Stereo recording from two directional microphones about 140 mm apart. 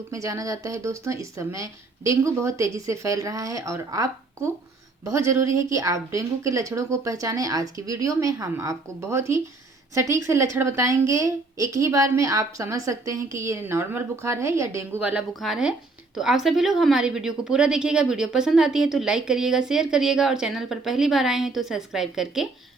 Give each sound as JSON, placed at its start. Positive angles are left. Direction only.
{"t": 0.1, "sound": "a woman's voice", "side_deg": -25}
{"t": 15.3, "sound": "a woman's voice", "side_deg": 0}